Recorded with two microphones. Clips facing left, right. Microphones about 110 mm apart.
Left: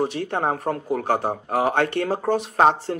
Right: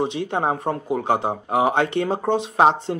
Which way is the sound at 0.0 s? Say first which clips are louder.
Right 1 dB; 20° right (ahead or behind).